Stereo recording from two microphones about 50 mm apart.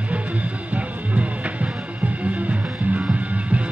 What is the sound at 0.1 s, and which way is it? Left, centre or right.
Music, right.